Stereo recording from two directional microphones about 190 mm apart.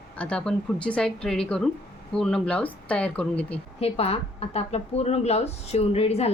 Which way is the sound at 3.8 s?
30° left (ahead or behind).